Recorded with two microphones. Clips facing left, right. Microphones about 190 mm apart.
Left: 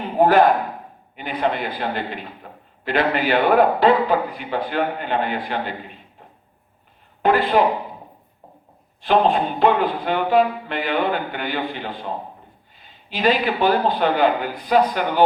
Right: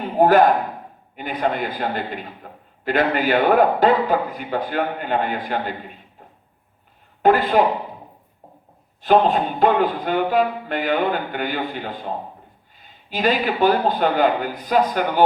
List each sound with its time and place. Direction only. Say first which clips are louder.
0.2 s speech: right 1 dB; 45° right (ahead or behind)
7.2 s speech: right 1 dB; 45° right (ahead or behind)
9.0 s a man's voice: right 1 dB; 45° right (ahead or behind)